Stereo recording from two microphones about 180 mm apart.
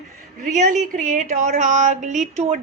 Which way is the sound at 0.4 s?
45° right (ahead or behind).